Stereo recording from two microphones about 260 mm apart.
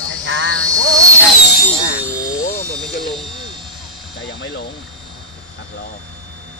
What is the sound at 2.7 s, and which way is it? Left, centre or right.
Speech, centre.